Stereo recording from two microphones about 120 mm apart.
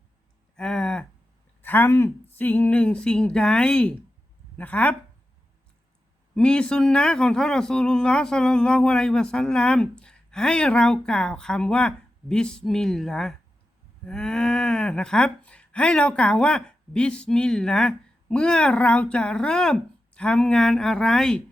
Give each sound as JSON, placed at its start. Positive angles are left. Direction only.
{"t": 0.5, "sound": "a sound", "side_deg": 5}
{"t": 1.6, "sound": "speech", "side_deg": 15}
{"t": 6.3, "sound": "speech", "side_deg": 5}